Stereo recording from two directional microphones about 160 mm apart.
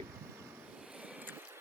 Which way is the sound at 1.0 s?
10° right (ahead or behind).